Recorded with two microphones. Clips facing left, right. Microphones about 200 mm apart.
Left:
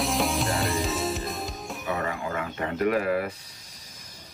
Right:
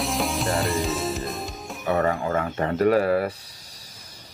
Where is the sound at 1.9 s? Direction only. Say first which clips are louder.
Right 7 dB; 40° right (ahead or behind).